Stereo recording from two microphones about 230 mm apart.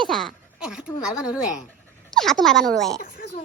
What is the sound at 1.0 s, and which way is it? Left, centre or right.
Speech, centre.